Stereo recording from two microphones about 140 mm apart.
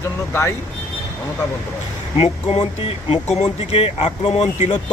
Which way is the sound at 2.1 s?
45° left (ahead or behind).